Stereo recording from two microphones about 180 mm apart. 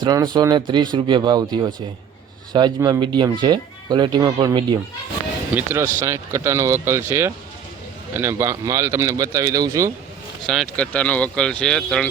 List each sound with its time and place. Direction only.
0.0 s speech: 20° right (ahead or behind)
10.4 s speech: centre (ahead or behind)